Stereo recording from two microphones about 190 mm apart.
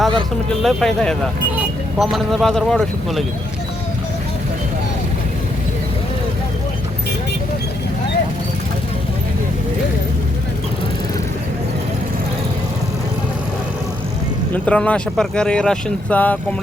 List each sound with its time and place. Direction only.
0.6 s speech: centre (ahead or behind)
14.5 s speech: 5° left (ahead or behind)